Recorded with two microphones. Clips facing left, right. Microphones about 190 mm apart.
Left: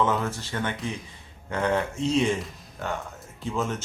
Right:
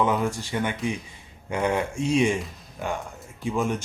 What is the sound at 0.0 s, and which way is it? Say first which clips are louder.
Speech: right 2 dB; 15° right (ahead or behind).